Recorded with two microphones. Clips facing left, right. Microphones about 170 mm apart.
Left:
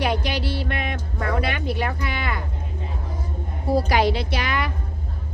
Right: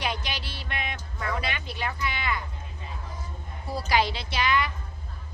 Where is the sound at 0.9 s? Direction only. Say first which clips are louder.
Left 6 dB; 55° left (ahead or behind).